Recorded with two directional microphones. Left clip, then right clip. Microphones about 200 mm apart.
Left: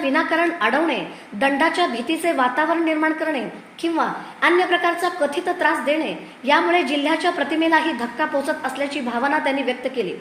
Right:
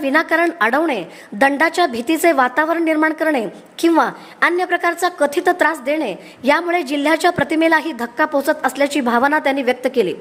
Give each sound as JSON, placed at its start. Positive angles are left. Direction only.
{"t": 0.0, "sound": "a woman's voice", "side_deg": -45}